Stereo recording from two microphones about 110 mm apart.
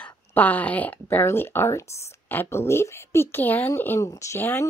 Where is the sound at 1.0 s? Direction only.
25° left (ahead or behind).